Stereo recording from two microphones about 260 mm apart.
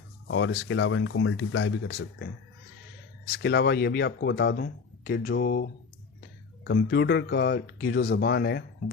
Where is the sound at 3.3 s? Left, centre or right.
Left.